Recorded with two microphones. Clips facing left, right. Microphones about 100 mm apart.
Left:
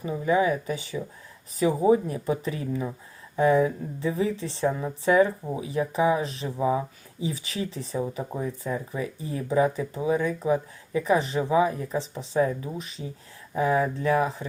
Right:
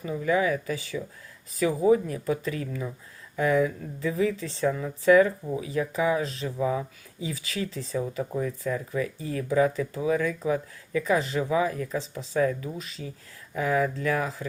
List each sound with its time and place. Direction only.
0.0 s speech: 25° left (ahead or behind)